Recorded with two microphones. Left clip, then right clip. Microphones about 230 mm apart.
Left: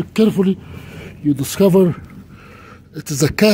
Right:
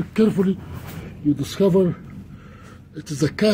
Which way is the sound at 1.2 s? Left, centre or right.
Left.